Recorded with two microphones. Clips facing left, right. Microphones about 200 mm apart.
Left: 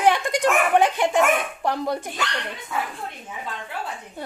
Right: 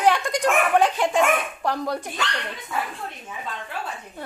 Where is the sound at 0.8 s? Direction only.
15° left (ahead or behind).